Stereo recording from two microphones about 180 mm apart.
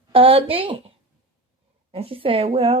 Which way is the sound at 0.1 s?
30° right (ahead or behind).